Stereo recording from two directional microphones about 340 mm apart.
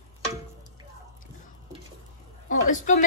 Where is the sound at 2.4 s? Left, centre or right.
Left.